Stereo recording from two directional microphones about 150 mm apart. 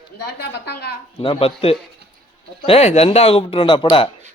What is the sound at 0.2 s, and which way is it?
Speech, 90° left.